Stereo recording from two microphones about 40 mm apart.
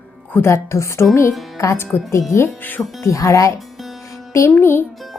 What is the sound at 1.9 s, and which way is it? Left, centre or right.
Speech, left.